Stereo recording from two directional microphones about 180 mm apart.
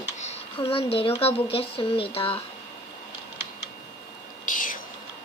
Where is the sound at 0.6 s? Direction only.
30° left (ahead or behind).